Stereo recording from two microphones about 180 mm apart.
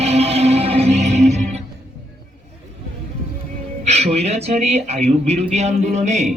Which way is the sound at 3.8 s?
35° right (ahead or behind).